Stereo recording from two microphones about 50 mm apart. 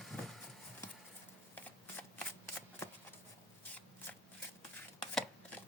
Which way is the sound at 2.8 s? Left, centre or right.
Left.